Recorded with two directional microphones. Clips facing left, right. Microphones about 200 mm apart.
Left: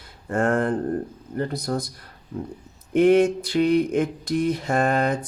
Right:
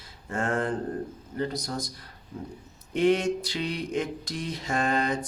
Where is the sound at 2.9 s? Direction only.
55° left (ahead or behind).